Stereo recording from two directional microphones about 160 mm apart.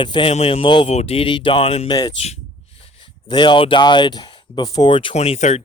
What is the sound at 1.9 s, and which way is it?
Speech, 25° left (ahead or behind).